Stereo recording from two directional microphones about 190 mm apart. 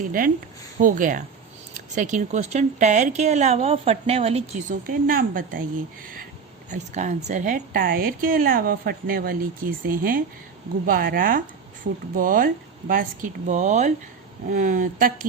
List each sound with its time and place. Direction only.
0.0 s a woman's voice: 45° right (ahead or behind); by 4.4 s 30° right (ahead or behind)
4.7 s a woman's voice: 50° right (ahead or behind)
6.7 s a woman's voice: 40° right (ahead or behind)
13.5 s a woman's voice: 40° right (ahead or behind)